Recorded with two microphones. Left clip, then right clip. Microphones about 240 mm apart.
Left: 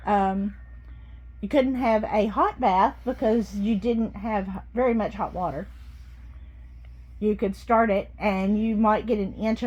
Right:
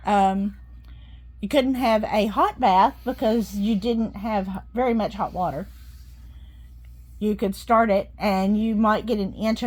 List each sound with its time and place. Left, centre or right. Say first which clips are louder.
0.0 s a woman's voice: right 3 dB; right
7.2 s a woman's voice: even; right